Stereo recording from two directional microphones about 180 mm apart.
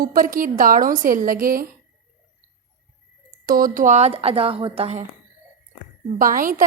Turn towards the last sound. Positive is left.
turn(degrees=-50)  # may be behind; listen again after turning